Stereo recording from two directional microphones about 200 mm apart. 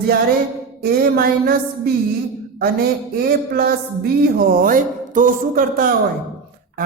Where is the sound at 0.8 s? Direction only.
50° right (ahead or behind).